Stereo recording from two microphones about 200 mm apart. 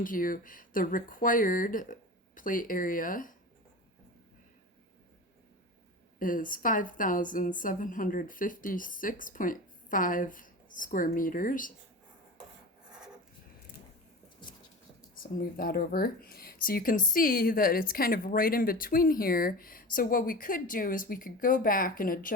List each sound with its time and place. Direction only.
0.0 s speech: 45° left (ahead or behind)
6.1 s speech: 45° left (ahead or behind)
15.1 s speech: 45° left (ahead or behind)